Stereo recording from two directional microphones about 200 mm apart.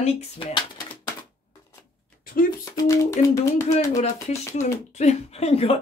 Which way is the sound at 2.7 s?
15° left (ahead or behind).